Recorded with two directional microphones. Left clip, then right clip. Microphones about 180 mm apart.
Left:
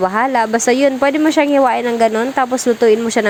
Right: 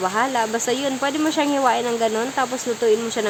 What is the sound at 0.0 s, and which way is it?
Speech, 35° left (ahead or behind).